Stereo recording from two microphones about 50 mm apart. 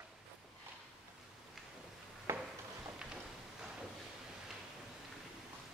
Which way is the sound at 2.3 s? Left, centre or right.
Right.